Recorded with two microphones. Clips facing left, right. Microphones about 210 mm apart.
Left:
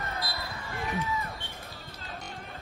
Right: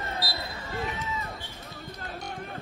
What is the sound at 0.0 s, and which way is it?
Basketball bounce, 30° right (ahead or behind).